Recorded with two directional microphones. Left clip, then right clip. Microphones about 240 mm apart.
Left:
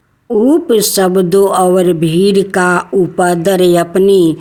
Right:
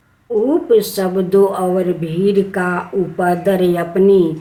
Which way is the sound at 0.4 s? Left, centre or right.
Left.